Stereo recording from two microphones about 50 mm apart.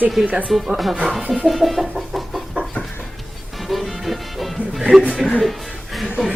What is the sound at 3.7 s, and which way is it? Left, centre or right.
Music, centre.